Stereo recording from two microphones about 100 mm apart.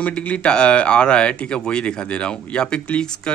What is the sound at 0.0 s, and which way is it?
Speech, 15° left (ahead or behind).